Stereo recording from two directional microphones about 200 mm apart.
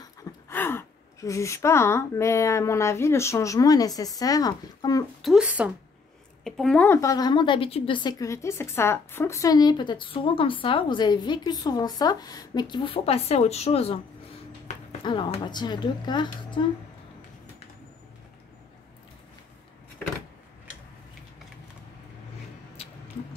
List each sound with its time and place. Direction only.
0.0 s speech: 15° left (ahead or behind)
5.2 s a woman's voice: 5° right (ahead or behind); by 16.6 s 25° left (ahead or behind)